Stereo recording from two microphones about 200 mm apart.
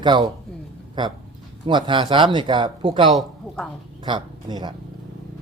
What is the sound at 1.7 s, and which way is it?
Speech, 25° right (ahead or behind).